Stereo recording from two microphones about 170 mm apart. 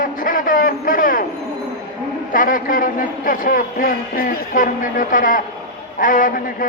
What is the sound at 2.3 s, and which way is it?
A man's voice, 55° left (ahead or behind).